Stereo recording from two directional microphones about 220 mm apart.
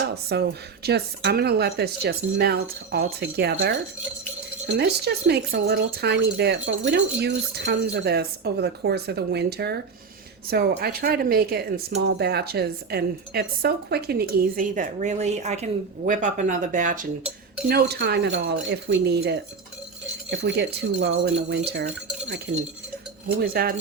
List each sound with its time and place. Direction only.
0.3 s speech: 50° right (ahead or behind)
17.7 s speech: 45° right (ahead or behind)
23.4 s speech: 45° right (ahead or behind)